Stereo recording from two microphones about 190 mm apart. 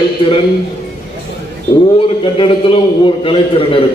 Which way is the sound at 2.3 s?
30° left (ahead or behind).